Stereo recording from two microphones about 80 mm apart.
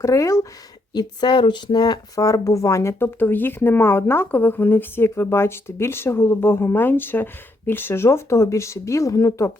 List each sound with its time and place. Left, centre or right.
0.0 s speech: left
0.9 s speech: left